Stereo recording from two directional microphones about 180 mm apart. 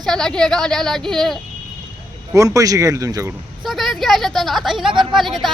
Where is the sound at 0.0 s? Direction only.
5° left (ahead or behind).